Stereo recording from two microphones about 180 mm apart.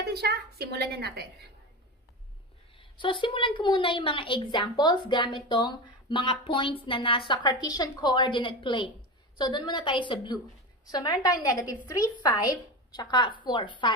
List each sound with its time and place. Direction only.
0.0 s a woman's voice: 60° right (ahead or behind)
2.8 s a woman's voice: 30° left (ahead or behind)